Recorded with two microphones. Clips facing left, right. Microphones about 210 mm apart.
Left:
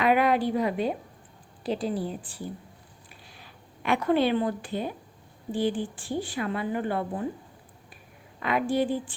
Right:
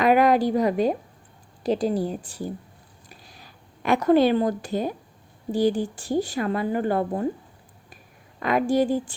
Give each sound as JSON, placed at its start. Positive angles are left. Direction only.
{"t": 0.0, "sound": "a woman's voice", "side_deg": -40}
{"t": 3.1, "sound": "a sound", "side_deg": -40}
{"t": 5.5, "sound": "a woman's voice", "side_deg": -40}
{"t": 8.4, "sound": "a woman's voice", "side_deg": -40}